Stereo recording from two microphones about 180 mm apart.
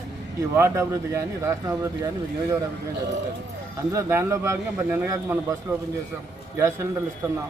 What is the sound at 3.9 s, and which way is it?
A man's voice, 15° right (ahead or behind).